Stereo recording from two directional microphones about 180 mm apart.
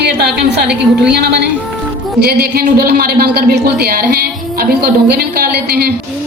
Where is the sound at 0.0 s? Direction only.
65° right (ahead or behind).